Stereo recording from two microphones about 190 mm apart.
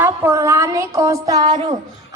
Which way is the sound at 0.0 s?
10° right (ahead or behind).